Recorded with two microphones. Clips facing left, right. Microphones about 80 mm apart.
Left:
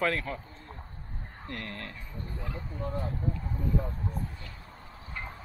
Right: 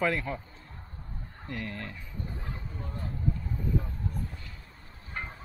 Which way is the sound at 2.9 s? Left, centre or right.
Left.